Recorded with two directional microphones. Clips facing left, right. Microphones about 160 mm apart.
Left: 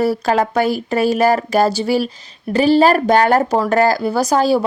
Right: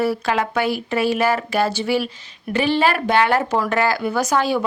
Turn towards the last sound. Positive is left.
turn(degrees=35)  # may be behind; listen again after turning